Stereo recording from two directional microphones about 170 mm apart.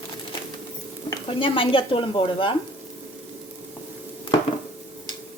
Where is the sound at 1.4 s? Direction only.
30° left (ahead or behind).